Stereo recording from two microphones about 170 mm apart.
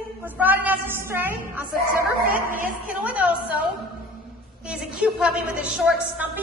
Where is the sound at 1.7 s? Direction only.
55° right (ahead or behind).